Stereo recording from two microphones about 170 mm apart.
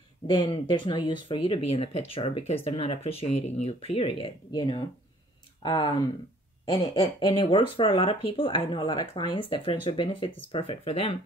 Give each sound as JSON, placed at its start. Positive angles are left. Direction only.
{"t": 0.3, "sound": "speech", "side_deg": 30}